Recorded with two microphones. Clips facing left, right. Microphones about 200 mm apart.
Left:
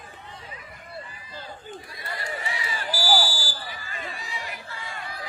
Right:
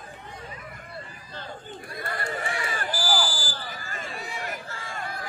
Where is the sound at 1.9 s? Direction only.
50° right (ahead or behind).